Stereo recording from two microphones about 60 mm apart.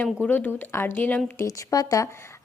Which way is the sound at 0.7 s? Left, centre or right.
Left.